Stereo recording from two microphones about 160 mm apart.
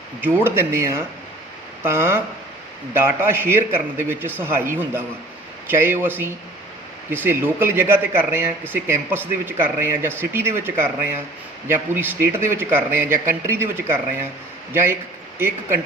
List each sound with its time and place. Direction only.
0.4 s a man's voice: 15° right (ahead or behind)